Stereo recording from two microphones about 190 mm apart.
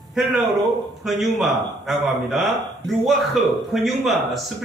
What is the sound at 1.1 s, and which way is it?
Speech, centre (ahead or behind).